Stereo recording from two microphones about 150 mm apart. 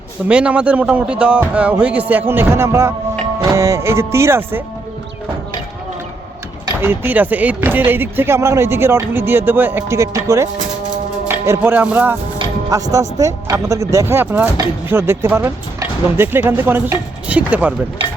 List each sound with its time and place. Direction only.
0.3 s speech: 10° right (ahead or behind)
6.8 s speech: 15° right (ahead or behind)
11.3 s music: 15° right (ahead or behind)
12.7 s speech: 20° right (ahead or behind)